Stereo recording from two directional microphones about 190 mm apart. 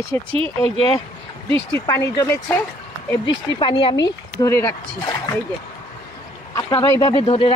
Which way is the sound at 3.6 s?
25° left (ahead or behind).